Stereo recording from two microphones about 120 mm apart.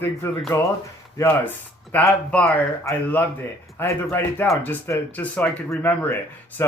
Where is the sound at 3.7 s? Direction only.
20° left (ahead or behind).